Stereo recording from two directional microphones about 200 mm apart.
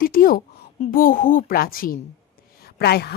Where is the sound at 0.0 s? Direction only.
45° left (ahead or behind).